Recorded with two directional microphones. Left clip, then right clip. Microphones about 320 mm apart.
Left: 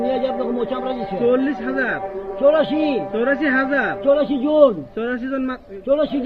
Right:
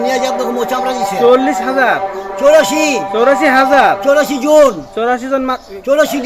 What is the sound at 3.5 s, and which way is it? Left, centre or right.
Speech, right.